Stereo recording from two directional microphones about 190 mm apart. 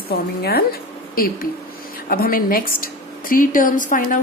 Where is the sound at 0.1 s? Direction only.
55° left (ahead or behind).